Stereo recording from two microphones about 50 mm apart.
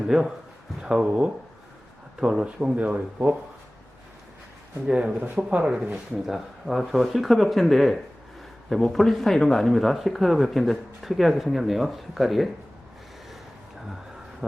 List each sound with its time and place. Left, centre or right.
0.1 s speech: centre
2.4 s speech: right
4.9 s speech: centre
5.9 s speech: centre